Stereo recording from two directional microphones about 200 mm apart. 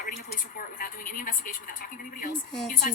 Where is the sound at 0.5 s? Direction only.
45° left (ahead or behind).